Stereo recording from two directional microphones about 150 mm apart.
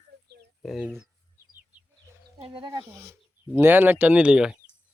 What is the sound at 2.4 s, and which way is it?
Speech, 35° right (ahead or behind).